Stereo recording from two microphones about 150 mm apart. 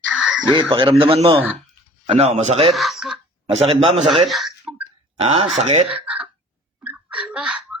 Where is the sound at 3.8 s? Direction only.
40° right (ahead or behind).